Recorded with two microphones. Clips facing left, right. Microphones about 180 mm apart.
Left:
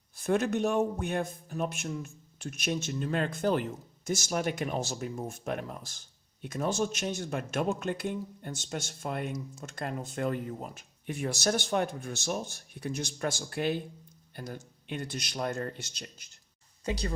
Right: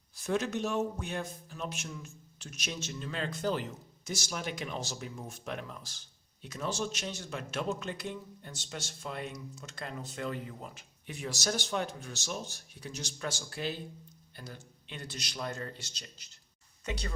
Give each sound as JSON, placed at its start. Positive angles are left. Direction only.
{"t": 0.2, "sound": "a man's voice", "side_deg": 55}
{"t": 16.8, "sound": "speech", "side_deg": 35}